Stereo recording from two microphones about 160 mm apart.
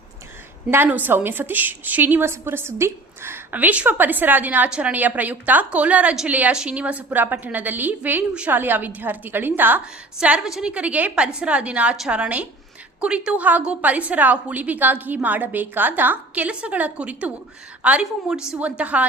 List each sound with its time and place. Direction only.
0.7 s a woman's voice: 10° right (ahead or behind)